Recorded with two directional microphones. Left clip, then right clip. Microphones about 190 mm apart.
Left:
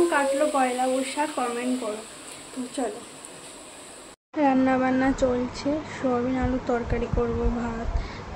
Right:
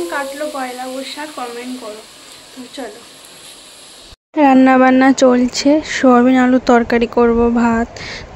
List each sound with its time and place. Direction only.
0.1 s speech: 5° left (ahead or behind)
4.4 s speech: 50° right (ahead or behind)